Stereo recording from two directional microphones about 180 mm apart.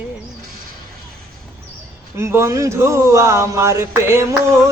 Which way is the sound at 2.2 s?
15° right (ahead or behind).